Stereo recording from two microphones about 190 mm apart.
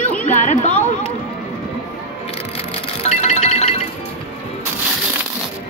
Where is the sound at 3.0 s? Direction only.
35° left (ahead or behind).